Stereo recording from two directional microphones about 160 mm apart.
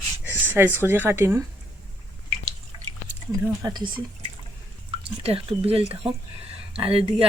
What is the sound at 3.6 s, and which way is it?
Speech, 25° right (ahead or behind).